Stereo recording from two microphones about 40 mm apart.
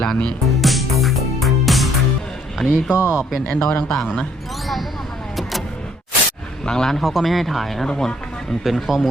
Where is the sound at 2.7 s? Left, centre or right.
Right.